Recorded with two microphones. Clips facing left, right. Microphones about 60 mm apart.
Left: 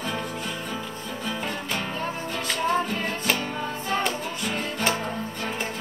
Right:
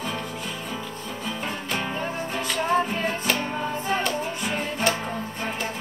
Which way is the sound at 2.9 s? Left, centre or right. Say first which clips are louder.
Right 2 dB; right.